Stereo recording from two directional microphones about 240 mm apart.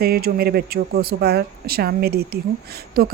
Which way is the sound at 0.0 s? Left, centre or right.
Right.